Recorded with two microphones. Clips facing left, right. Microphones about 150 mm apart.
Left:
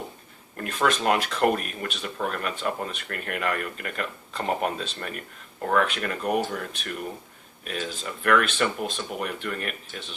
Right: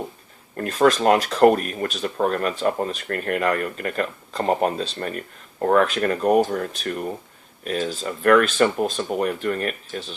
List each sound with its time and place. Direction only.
0.5 s speech: 35° right (ahead or behind)